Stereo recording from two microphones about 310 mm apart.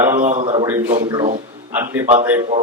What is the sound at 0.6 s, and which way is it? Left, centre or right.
Speech, centre.